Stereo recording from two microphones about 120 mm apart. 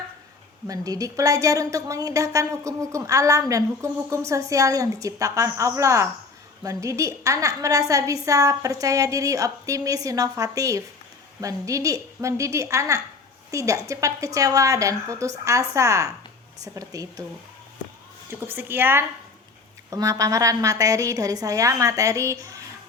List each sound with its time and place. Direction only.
0.7 s a woman's voice: 30° right (ahead or behind)
18.3 s speech: 15° right (ahead or behind)
19.9 s a woman's voice: 30° right (ahead or behind)